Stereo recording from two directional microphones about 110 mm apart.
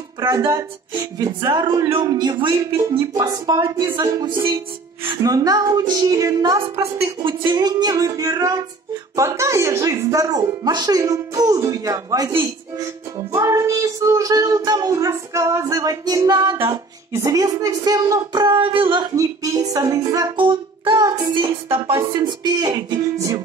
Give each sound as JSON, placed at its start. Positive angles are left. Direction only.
{"t": 0.2, "sound": "speech", "side_deg": -30}
{"t": 7.2, "sound": "speech", "side_deg": -45}
{"t": 19.1, "sound": "speech", "side_deg": -30}
{"t": 20.3, "sound": "music", "side_deg": -50}
{"t": 22.1, "sound": "speech", "side_deg": -40}